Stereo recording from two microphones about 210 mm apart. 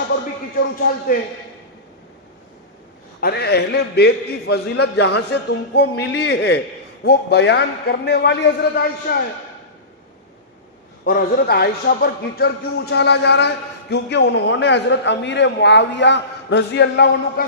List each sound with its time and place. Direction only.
3.2 s a man's voice: 50° left (ahead or behind)
11.0 s a man's voice: 45° left (ahead or behind)